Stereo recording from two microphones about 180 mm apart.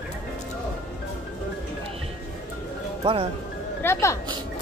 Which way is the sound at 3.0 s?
25° right (ahead or behind).